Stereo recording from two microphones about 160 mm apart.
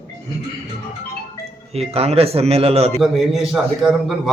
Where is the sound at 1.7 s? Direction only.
40° right (ahead or behind).